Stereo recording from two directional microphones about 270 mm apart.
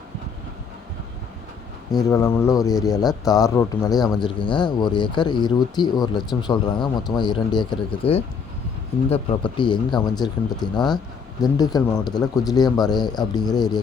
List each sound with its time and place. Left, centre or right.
2.0 s speech: centre